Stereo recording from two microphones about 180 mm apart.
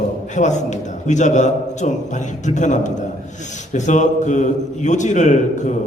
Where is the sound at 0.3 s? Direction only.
40° left (ahead or behind).